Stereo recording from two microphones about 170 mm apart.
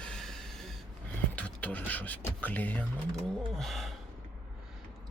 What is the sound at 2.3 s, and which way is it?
Speech, 10° left (ahead or behind).